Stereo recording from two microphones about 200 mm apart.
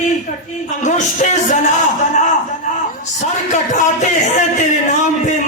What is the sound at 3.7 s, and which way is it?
A man's voice, 35° left (ahead or behind).